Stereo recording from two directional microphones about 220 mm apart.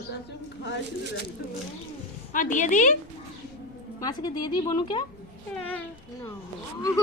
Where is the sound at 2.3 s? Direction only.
35° left (ahead or behind).